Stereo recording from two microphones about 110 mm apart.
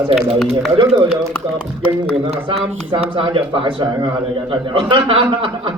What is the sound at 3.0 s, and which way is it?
A man's voice, 55° right (ahead or behind).